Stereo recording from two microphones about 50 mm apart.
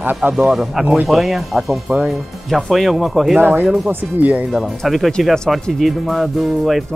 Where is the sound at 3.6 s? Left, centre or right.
Centre.